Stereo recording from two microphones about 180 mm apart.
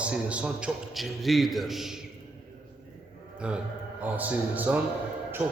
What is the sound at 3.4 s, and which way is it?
A man's voice, 5° right (ahead or behind).